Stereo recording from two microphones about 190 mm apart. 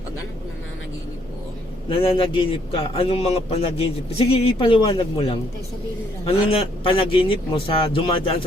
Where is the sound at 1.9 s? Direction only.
30° left (ahead or behind).